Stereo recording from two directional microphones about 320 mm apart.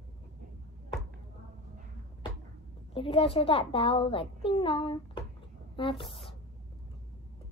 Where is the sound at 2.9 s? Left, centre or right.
Centre.